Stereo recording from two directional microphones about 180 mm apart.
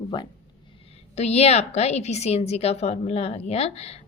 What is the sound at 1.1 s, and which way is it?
A woman's voice, 35° left (ahead or behind).